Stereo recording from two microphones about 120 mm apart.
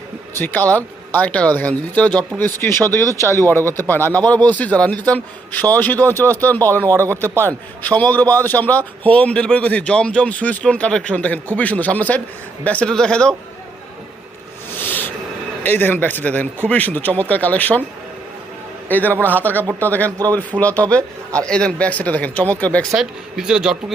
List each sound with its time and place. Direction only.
0.3 s speech: 15° left (ahead or behind)
6.9 s speech: 25° right (ahead or behind)
7.3 s speech: 15° left (ahead or behind)
14.7 s owl: 15° left (ahead or behind)
15.6 s speech: 15° left (ahead or behind)
18.9 s a man's voice: 15° left (ahead or behind)
20.1 s speech: 30° right (ahead or behind)
20.3 s speech: 10° left (ahead or behind)
22.9 s speech: 5° right (ahead or behind)